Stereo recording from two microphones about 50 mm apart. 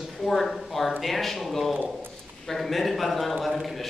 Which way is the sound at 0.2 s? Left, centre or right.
Centre.